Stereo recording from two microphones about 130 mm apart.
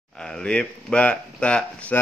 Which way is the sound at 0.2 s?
5° left (ahead or behind).